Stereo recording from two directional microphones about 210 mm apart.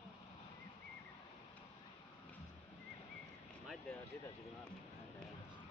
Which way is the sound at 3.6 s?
Centre (ahead or behind).